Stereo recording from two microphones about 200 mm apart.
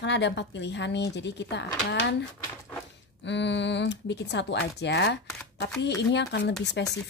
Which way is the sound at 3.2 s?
60° left (ahead or behind).